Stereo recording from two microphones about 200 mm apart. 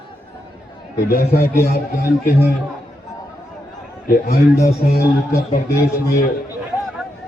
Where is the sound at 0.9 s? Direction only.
50° left (ahead or behind).